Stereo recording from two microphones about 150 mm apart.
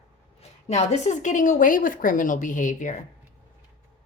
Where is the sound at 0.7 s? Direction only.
50° left (ahead or behind).